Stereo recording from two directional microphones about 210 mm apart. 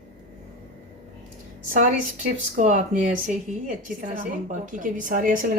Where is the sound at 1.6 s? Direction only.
40° right (ahead or behind).